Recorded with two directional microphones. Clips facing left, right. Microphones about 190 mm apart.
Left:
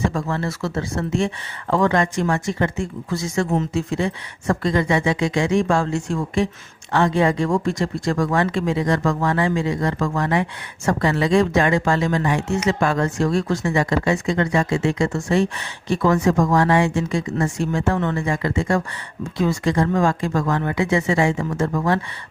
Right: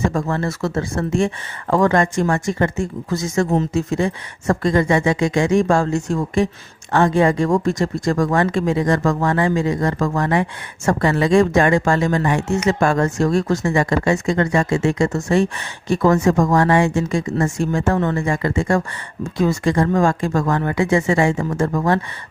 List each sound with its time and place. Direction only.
0.1 s speech: 45° right (ahead or behind)